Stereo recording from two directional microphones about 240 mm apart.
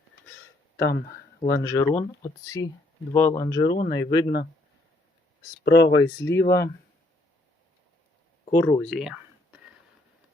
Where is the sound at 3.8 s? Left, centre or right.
Centre.